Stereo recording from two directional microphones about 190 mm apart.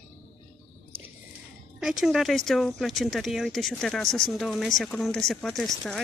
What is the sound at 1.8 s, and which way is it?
Speech, centre (ahead or behind).